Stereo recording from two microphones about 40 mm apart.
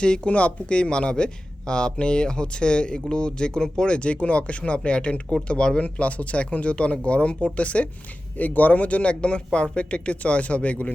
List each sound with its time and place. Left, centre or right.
0.0 s speech: left
5.8 s speech: left
8.4 s speech: left